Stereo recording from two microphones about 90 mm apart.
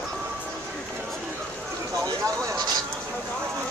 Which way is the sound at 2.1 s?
45° right (ahead or behind).